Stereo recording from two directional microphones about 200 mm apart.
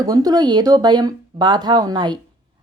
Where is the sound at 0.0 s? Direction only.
20° right (ahead or behind).